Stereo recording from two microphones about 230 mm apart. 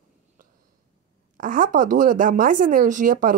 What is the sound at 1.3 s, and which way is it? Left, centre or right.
A woman's voice, right.